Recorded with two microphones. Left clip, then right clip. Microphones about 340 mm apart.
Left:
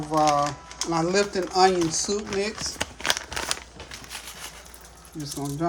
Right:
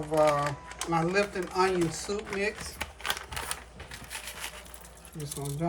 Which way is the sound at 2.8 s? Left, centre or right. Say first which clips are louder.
Left 7 dB; left.